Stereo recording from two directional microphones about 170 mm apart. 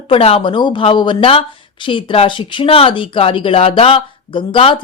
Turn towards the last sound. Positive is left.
turn(degrees=30)  # may be behind; listen again after turning